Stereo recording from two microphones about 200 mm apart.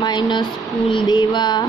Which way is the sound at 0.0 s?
20° left (ahead or behind).